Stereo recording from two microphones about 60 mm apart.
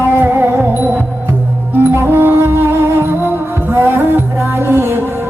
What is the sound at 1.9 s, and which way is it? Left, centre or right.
Music, right.